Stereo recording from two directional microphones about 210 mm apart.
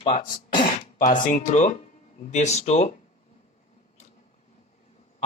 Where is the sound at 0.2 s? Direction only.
45° left (ahead or behind).